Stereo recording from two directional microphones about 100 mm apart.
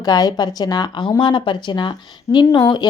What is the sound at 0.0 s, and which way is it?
A woman's voice, 40° left (ahead or behind).